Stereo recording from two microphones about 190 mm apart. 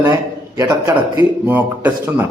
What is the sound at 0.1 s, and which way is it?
A man's voice, 20° right (ahead or behind).